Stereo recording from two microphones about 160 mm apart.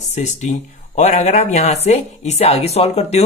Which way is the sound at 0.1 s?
50° left (ahead or behind).